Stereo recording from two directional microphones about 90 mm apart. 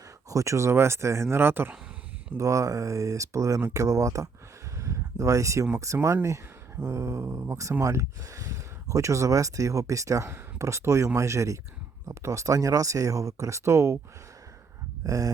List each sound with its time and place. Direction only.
0.3 s speech: 35° right (ahead or behind)
2.4 s speech: 40° right (ahead or behind)
4.8 s a sound: 35° right (ahead or behind)
5.7 s speech: 35° right (ahead or behind)
15.0 s speech: 40° right (ahead or behind)